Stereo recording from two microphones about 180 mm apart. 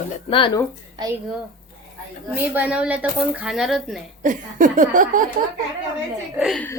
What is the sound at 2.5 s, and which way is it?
A woman's voice, 5° right (ahead or behind).